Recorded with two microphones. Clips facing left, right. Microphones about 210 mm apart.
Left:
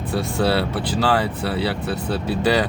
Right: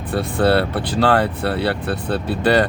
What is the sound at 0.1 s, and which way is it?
Speech, 55° right (ahead or behind).